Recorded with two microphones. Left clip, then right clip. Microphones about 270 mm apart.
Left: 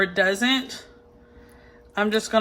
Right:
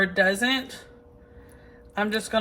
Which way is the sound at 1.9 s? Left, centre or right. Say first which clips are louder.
Left 4 dB; left.